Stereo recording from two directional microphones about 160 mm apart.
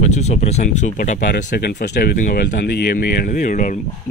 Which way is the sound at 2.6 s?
80° left.